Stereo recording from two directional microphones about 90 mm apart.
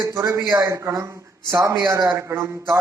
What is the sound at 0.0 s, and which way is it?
A man's voice, 30° right (ahead or behind).